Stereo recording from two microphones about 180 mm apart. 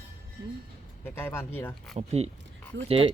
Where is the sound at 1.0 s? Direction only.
10° left (ahead or behind).